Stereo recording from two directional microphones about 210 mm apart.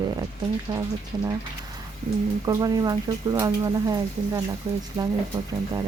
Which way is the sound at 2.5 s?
15° right (ahead or behind).